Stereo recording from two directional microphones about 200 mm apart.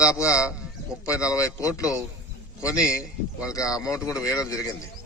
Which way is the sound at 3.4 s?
15° left (ahead or behind).